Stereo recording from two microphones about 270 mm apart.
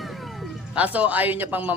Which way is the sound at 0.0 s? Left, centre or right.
Centre.